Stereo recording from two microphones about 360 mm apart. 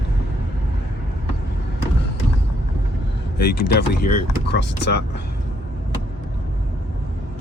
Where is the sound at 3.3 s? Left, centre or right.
Left.